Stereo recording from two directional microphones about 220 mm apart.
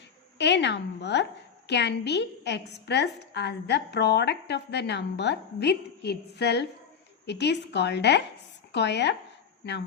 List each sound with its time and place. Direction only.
0.3 s a woman's voice: 50° left (ahead or behind)